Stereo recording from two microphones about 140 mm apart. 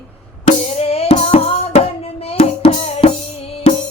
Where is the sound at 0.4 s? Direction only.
45° left (ahead or behind).